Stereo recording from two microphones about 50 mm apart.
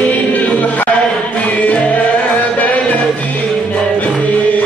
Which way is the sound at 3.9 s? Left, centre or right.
Left.